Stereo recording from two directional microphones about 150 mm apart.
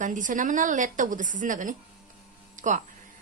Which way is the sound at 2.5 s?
55° right (ahead or behind).